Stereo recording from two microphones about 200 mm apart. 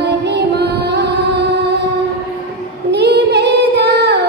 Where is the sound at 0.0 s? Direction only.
55° right (ahead or behind).